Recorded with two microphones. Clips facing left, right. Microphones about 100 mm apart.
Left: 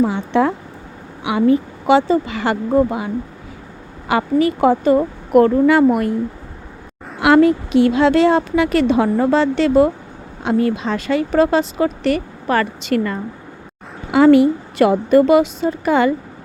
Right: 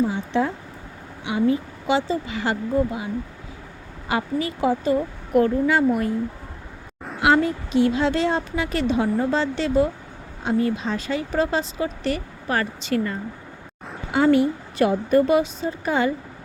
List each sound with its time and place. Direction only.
0.0 s a woman's voice: 70° left (ahead or behind)
4.1 s a woman's voice: 70° left (ahead or behind)
7.2 s speech: 70° left (ahead or behind)
14.1 s a woman's voice: 90° left